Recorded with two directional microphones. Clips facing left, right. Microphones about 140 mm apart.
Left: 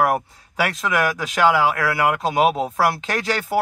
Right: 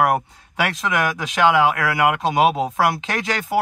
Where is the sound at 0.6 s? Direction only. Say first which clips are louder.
Even; centre (ahead or behind).